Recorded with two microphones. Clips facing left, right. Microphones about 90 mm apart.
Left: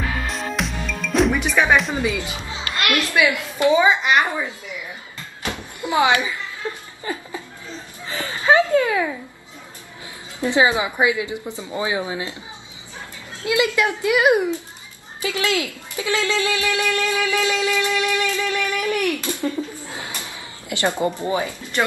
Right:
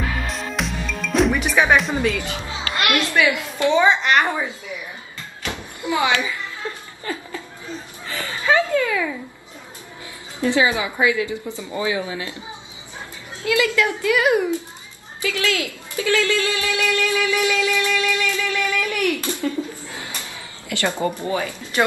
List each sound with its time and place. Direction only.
0.3 s music: centre (ahead or behind)
2.1 s speech: 20° left (ahead or behind)
2.8 s a woman's voice: 20° right (ahead or behind)
3.2 s a woman's voice: 20° left (ahead or behind)
3.7 s a woman's voice: 10° left (ahead or behind)
5.8 s speech: 20° left (ahead or behind)
6.6 s a sound: 20° left (ahead or behind)
7.1 s a woman's voice: 20° left (ahead or behind)
8.0 s chicken: 20° left (ahead or behind)
10.4 s a woman's voice: 20° left (ahead or behind)
13.4 s a woman's voice: 20° left (ahead or behind)
19.0 s speech: 20° right (ahead or behind)
19.4 s a sound: 20° left (ahead or behind)
20.7 s a woman's voice: 20° left (ahead or behind)